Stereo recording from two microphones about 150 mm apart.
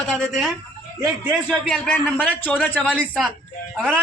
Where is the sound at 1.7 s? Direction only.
10° left (ahead or behind).